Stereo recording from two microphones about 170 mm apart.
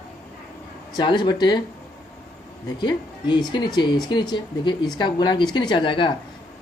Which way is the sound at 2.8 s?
25° left (ahead or behind).